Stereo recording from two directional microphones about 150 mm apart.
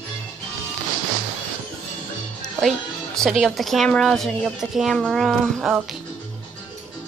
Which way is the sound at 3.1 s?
Centre (ahead or behind).